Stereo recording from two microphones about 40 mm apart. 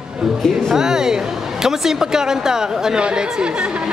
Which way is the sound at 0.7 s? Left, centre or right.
Centre.